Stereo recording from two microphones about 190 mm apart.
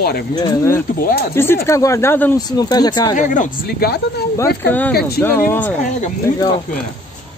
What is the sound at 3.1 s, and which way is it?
Speech, 40° left (ahead or behind).